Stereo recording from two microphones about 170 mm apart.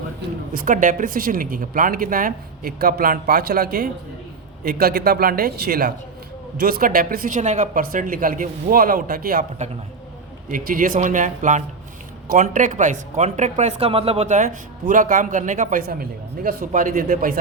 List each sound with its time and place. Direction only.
0.5 s speech: 50° right (ahead or behind)